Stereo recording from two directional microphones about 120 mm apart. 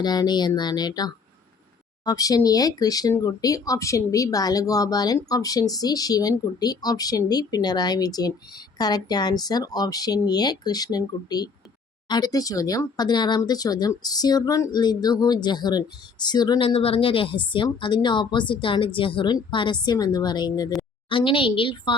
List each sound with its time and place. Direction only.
0.0 s speech: 35° left (ahead or behind)
16.6 s speech: 50° left (ahead or behind)